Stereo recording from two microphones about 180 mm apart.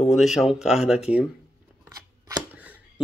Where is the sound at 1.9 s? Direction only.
20° right (ahead or behind).